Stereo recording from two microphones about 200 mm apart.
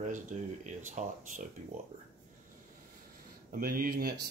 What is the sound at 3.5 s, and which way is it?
Speech, 45° right (ahead or behind).